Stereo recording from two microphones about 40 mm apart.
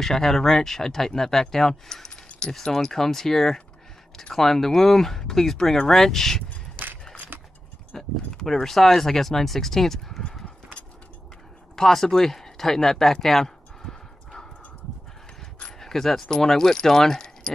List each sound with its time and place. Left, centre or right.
0.0 s speech: centre
7.3 s a sound: right
7.9 s speech: centre
11.7 s speech: centre
13.8 s horse: centre
15.8 s speech: centre